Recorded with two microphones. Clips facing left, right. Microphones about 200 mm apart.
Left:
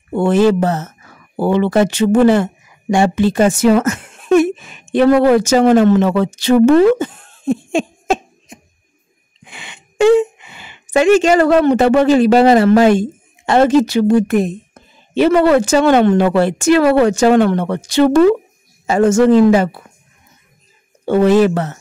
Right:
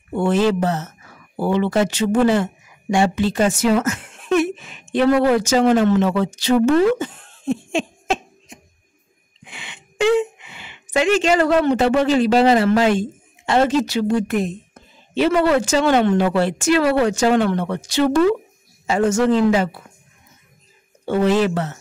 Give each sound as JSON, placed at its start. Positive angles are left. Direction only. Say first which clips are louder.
{"t": 0.1, "sound": "speech", "louder": "left 5 dB", "side_deg": 55}
{"t": 1.3, "sound": "a woman's voice", "louder": "left 5 dB", "side_deg": 60}
{"t": 9.5, "sound": "speech", "louder": "left 2 dB", "side_deg": 45}
{"t": 21.0, "sound": "speech", "louder": "left 6 dB", "side_deg": 55}